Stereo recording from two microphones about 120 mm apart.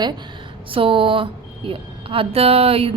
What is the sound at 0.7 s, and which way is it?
Speech, 45° right (ahead or behind).